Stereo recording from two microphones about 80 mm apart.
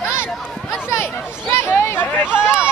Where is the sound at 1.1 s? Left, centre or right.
Left.